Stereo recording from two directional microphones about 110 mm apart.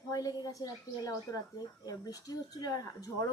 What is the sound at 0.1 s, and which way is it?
Speech, 35° left (ahead or behind).